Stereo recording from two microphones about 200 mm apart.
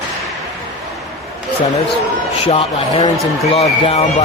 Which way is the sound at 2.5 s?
30° left (ahead or behind).